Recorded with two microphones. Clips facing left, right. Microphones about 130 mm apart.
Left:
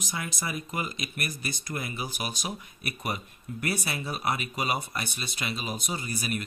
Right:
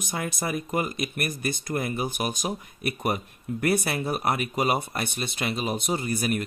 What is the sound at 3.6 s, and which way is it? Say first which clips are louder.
Speech: right 7 dB; 55° right (ahead or behind).